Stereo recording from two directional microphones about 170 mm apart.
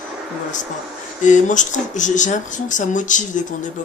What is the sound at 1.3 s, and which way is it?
Speech, 45° left (ahead or behind).